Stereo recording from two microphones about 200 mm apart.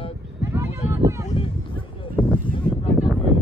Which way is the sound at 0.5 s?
15° right (ahead or behind).